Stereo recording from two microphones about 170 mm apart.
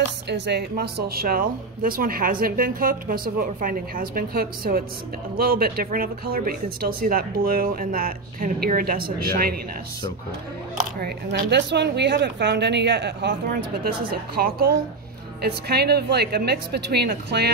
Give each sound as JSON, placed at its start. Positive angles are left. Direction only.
{"t": 0.3, "sound": "speech", "side_deg": -75}
{"t": 10.8, "sound": "speech", "side_deg": -65}
{"t": 14.3, "sound": "a woman's voice", "side_deg": -65}